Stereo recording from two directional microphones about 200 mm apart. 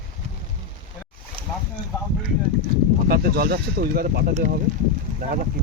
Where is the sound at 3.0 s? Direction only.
50° right (ahead or behind).